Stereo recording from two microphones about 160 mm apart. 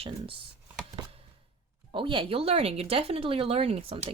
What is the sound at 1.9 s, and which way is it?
Speech, 30° right (ahead or behind).